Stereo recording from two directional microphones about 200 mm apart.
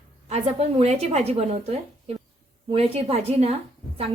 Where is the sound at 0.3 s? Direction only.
30° right (ahead or behind).